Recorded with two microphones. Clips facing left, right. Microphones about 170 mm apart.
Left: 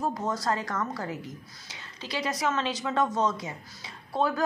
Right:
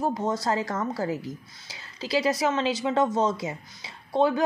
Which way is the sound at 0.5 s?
30° right (ahead or behind).